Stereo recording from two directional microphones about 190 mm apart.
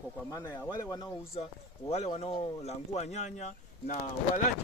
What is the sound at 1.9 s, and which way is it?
Speech, 35° left (ahead or behind).